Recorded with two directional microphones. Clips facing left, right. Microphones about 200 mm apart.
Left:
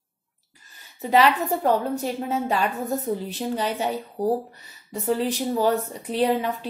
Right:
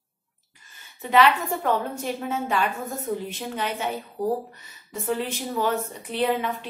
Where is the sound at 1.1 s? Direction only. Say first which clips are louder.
Left 1 dB; 35° left (ahead or behind).